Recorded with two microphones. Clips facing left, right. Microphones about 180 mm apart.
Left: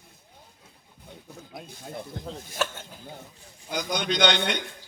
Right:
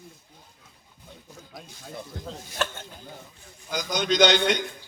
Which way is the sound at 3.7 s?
60° left (ahead or behind).